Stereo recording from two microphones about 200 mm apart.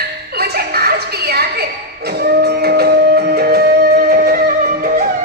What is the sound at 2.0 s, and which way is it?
Music, 50° right (ahead or behind).